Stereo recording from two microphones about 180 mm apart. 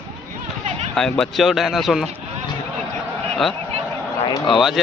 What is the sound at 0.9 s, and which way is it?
Speech, 5° left (ahead or behind).